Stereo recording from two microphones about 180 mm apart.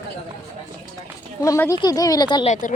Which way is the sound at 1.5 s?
15° left (ahead or behind).